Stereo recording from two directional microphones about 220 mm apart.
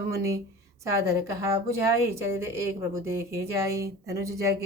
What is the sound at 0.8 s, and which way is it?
A woman's voice, 15° right (ahead or behind).